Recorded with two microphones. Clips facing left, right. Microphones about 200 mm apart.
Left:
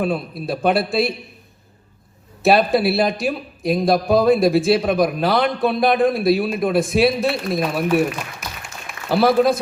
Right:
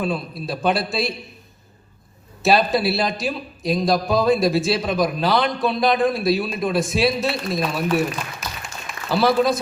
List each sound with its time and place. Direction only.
0.0 s a man's voice: 55° left (ahead or behind)
2.4 s a man's voice: 55° left (ahead or behind)
7.9 s applause: 55° left (ahead or behind)